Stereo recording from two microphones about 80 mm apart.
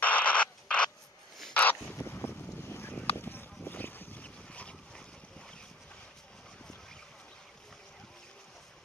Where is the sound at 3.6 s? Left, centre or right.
Left; by 7.0 s centre.